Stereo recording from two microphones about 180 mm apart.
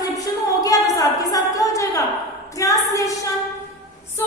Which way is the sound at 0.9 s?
20° left (ahead or behind).